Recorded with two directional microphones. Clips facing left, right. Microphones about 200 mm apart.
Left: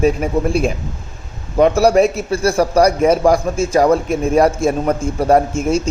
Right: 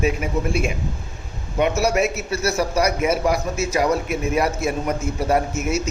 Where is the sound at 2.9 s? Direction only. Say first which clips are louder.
Left 7 dB; 35° left (ahead or behind).